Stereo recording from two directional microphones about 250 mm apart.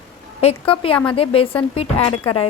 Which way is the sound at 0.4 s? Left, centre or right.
Left.